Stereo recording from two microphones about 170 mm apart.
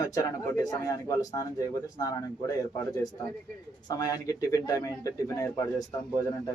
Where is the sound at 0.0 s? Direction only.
20° left (ahead or behind).